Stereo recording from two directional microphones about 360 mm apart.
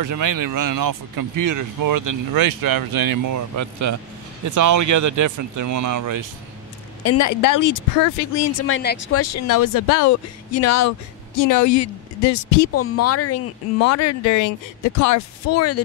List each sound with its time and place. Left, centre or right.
0.0 s speech: right
7.0 s a woman's voice: left
12.7 s a woman's voice: left